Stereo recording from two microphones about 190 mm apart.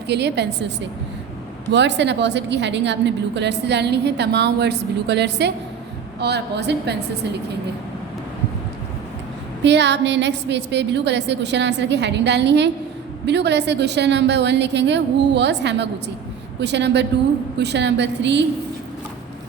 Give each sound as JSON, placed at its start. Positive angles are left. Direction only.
{"t": 0.1, "sound": "a woman's voice", "side_deg": -60}
{"t": 1.7, "sound": "a woman's voice", "side_deg": -65}
{"t": 9.6, "sound": "a woman's voice", "side_deg": -65}